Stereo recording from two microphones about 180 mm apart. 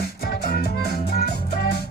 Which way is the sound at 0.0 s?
60° left (ahead or behind).